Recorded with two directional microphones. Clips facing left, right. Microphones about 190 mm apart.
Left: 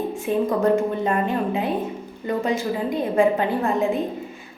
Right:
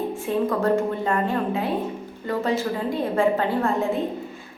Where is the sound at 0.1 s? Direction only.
15° left (ahead or behind).